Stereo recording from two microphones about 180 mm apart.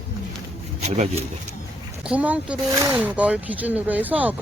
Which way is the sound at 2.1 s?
5° right (ahead or behind).